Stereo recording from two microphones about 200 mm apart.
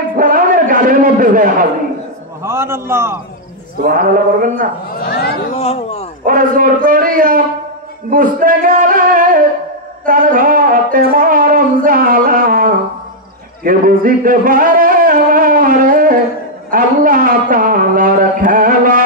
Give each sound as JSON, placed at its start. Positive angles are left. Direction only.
{"t": 0.2, "sound": "a man's voice", "side_deg": -40}
{"t": 2.4, "sound": "a man's voice", "side_deg": -10}
{"t": 3.8, "sound": "speech", "side_deg": -45}
{"t": 4.9, "sound": "speech", "side_deg": 50}
{"t": 5.6, "sound": "a sound", "side_deg": 30}
{"t": 6.2, "sound": "a man's voice", "side_deg": -45}
{"t": 10.0, "sound": "music", "side_deg": -40}
{"t": 13.7, "sound": "a sound", "side_deg": -40}